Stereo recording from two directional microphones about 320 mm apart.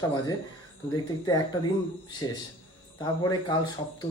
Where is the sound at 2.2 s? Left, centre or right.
Centre.